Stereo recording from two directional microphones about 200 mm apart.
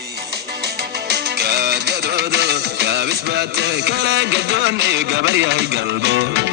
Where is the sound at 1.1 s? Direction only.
55° right (ahead or behind).